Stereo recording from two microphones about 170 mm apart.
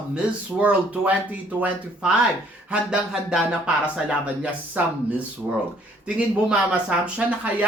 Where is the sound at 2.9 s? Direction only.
5° right (ahead or behind).